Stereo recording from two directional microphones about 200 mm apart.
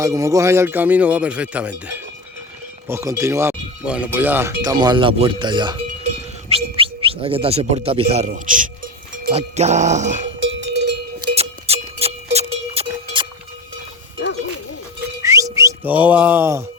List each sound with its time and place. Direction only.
0.0 s speech: 15° right (ahead or behind)
6.7 s speech: 25° right (ahead or behind)
9.3 s music: 35° right (ahead or behind)
10.4 s cowbell: 65° right (ahead or behind)
11.3 s music: 30° right (ahead or behind)
15.2 s music: 15° right (ahead or behind)